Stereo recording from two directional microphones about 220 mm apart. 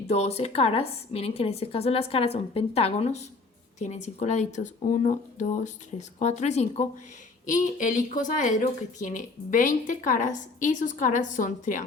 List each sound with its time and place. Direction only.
0.1 s a woman's voice: 30° left (ahead or behind)